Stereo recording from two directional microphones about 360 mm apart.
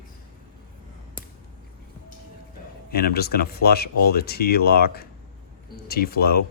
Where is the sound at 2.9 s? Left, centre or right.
Left.